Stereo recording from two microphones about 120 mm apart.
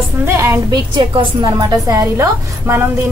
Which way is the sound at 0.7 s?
35° right (ahead or behind).